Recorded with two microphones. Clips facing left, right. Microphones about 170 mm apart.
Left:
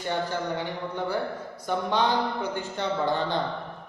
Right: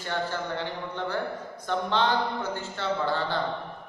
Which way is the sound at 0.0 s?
15° left (ahead or behind).